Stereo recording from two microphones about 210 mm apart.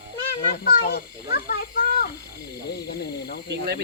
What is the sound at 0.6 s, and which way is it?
Speech, 45° left (ahead or behind).